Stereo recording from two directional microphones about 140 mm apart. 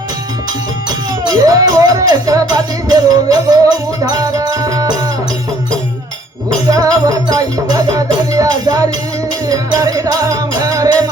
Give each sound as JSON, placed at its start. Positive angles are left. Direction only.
{"t": 1.3, "sound": "speech", "side_deg": -25}
{"t": 6.7, "sound": "speech", "side_deg": -25}
{"t": 8.3, "sound": "music", "side_deg": -25}
{"t": 9.5, "sound": "speech", "side_deg": -25}